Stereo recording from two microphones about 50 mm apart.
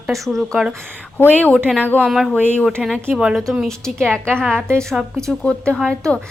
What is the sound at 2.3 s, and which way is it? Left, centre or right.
Speech, left.